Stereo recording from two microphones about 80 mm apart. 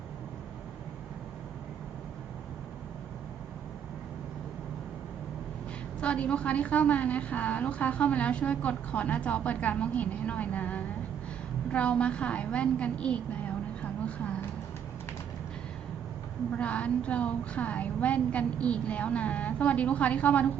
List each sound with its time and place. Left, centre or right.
6.0 s a woman's voice: centre
13.8 s vehicle: centre
16.6 s a woman's voice: centre